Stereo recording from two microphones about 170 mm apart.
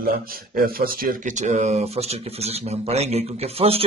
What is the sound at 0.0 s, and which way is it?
Speech, 60° right (ahead or behind).